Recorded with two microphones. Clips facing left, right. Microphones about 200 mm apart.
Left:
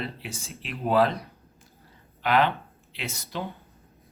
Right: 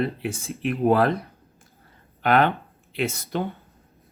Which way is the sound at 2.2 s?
55° right (ahead or behind).